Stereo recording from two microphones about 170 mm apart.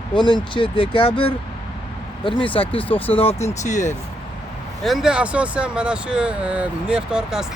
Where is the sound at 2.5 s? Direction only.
30° left (ahead or behind).